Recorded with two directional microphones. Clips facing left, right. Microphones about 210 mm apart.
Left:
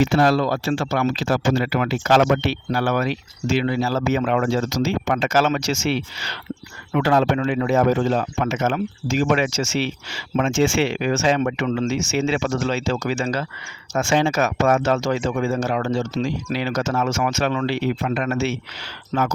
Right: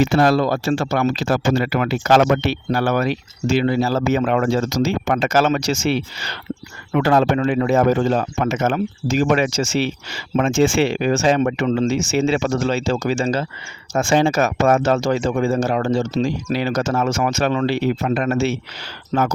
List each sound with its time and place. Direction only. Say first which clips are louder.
0.0 s speech: right 2 dB; 45° right (ahead or behind)
10.1 s speech: right 2 dB; 45° right (ahead or behind)